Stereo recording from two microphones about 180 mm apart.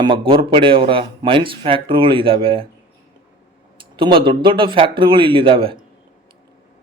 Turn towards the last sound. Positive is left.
turn(degrees=-30)  # may be behind; listen again after turning